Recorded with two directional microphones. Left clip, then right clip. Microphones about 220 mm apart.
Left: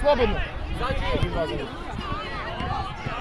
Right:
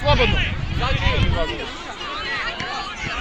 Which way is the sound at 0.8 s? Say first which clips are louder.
Right 4 dB; 55° left (ahead or behind).